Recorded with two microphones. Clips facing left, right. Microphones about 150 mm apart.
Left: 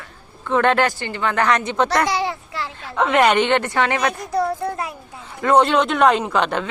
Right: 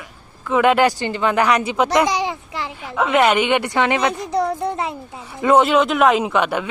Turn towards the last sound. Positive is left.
turn(degrees=-10)  # may be behind; listen again after turning